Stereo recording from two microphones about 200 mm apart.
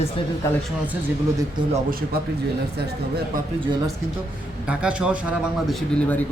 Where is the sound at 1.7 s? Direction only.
45° right (ahead or behind).